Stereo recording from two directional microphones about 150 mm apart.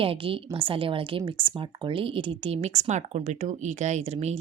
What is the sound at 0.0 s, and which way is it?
A woman's voice, 40° right (ahead or behind).